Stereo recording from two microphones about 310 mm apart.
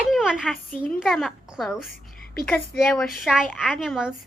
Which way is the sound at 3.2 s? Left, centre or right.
Centre.